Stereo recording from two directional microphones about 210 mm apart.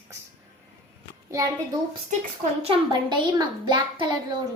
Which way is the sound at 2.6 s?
25° right (ahead or behind).